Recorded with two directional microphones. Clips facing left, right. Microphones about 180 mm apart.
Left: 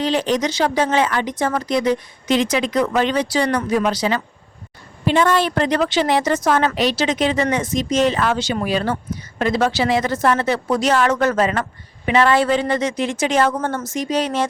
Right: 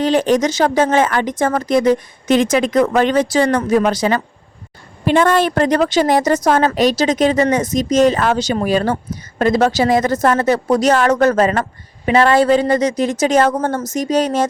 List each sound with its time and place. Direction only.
0.0 s speech: 50° right (ahead or behind)